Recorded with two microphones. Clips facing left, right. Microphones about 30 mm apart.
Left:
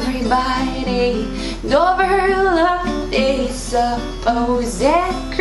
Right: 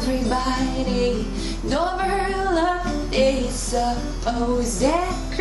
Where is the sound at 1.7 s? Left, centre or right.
Left.